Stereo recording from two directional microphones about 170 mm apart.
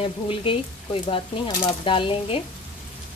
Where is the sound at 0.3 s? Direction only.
30° left (ahead or behind).